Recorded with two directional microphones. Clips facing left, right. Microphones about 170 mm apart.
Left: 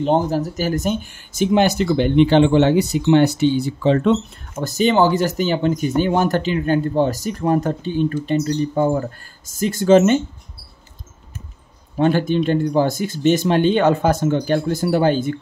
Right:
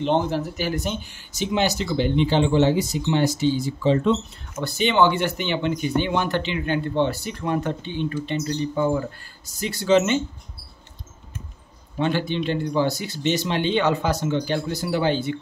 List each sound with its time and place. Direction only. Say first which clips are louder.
0.0 s speech: left 4 dB; 40° left (ahead or behind); by 4.6 s 60° left (ahead or behind)
4.6 s speech: left 4 dB; 40° left (ahead or behind)
12.0 s speech: left 6 dB; 45° left (ahead or behind)